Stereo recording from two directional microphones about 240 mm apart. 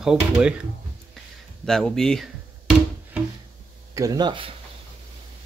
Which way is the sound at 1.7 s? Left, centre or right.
Centre.